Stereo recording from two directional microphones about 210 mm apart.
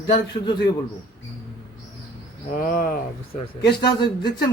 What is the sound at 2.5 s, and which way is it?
Speech, 40° left (ahead or behind).